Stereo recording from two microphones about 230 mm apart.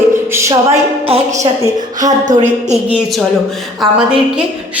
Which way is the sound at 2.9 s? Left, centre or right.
Centre.